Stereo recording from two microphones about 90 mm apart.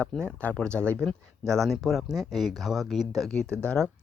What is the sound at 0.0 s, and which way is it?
Speech, 10° left (ahead or behind).